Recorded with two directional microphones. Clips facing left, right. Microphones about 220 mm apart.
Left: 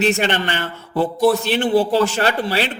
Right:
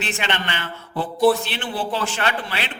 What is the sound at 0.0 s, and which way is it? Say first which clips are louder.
A man's voice: left 8 dB; 45° left (ahead or behind).